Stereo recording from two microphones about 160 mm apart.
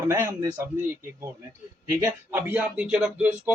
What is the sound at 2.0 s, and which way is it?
Speech, 10° right (ahead or behind).